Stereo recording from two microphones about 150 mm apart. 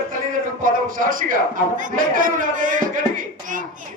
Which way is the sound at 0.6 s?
65° right (ahead or behind).